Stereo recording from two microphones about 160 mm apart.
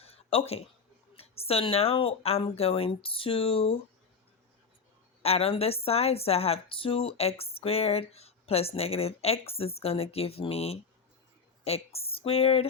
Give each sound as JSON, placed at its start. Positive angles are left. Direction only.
{"t": 0.0, "sound": "a sound", "side_deg": 35}
{"t": 1.1, "sound": "a woman's voice", "side_deg": 40}
{"t": 5.2, "sound": "a woman's voice", "side_deg": 40}